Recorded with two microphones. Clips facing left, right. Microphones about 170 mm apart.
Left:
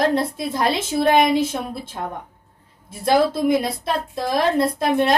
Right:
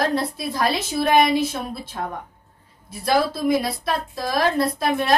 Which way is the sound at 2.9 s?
25° left (ahead or behind).